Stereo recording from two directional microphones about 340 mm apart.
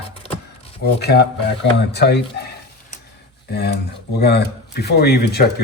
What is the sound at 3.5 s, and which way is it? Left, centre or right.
Speech, left.